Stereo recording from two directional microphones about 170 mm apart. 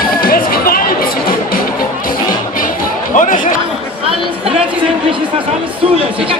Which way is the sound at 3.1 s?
50° left (ahead or behind).